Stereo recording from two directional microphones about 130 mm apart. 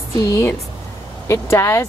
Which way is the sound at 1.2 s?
20° left (ahead or behind).